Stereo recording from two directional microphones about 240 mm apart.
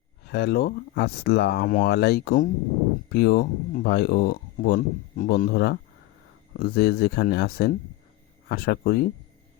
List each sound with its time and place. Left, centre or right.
0.3 s speech: left